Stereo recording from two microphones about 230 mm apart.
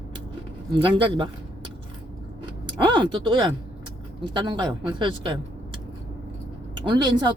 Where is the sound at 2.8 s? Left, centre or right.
Centre.